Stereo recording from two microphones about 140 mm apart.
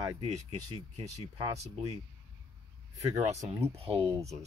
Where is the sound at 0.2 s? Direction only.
50° right (ahead or behind).